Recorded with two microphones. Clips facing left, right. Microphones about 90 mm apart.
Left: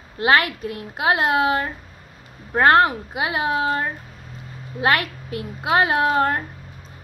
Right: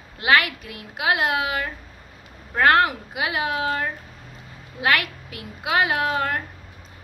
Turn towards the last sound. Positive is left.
turn(degrees=30)  # may be behind; listen again after turning